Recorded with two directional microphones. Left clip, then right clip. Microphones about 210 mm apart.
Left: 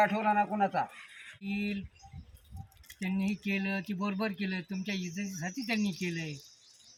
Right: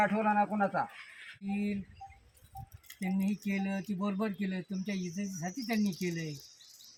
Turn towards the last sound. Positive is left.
turn(degrees=5)  # may be behind; listen again after turning